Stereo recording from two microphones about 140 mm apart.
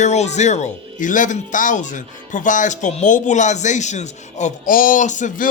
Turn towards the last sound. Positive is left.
turn(degrees=60)  # may be behind; listen again after turning